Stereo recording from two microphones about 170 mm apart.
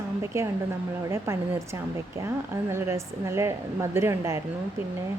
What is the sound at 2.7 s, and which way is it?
Speech, 15° right (ahead or behind).